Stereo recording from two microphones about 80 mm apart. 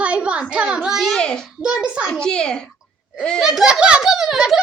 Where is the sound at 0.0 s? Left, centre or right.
Centre.